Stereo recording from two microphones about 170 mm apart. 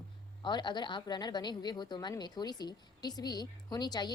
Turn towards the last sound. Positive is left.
turn(degrees=25)  # may be behind; listen again after turning